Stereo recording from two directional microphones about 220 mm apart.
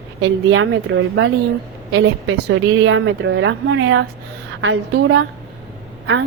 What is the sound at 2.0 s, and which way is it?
Speech, 50° right (ahead or behind).